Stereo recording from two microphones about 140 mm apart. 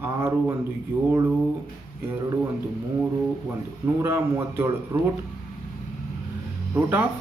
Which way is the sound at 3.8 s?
15° right (ahead or behind).